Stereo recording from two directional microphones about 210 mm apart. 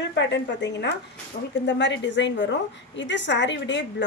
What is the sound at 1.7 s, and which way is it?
A woman's voice, 55° left (ahead or behind).